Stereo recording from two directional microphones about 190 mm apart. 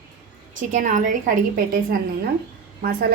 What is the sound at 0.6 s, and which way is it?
A woman's voice, 40° right (ahead or behind).